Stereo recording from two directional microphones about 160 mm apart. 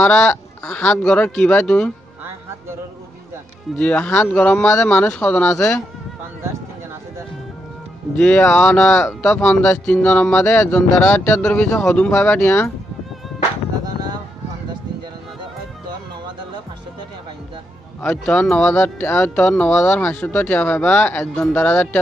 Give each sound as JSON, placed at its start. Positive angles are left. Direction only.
{"t": 0.0, "sound": "speech", "side_deg": 5}
{"t": 3.7, "sound": "speech", "side_deg": 5}
{"t": 8.2, "sound": "speech", "side_deg": 10}
{"t": 18.0, "sound": "speech", "side_deg": 5}